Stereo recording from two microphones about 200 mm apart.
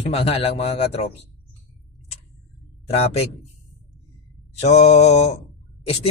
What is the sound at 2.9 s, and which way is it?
Speech, 30° left (ahead or behind).